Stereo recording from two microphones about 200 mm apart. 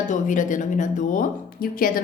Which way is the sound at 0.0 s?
40° left (ahead or behind).